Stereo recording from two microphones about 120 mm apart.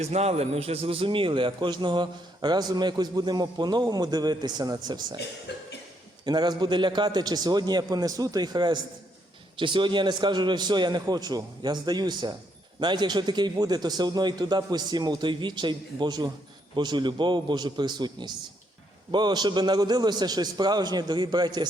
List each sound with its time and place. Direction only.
0.0 s a man's voice: 65° right (ahead or behind); by 4.9 s 35° right (ahead or behind)
6.2 s a man's voice: 35° right (ahead or behind)